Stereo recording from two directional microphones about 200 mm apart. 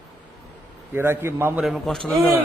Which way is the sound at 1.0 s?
10° right (ahead or behind).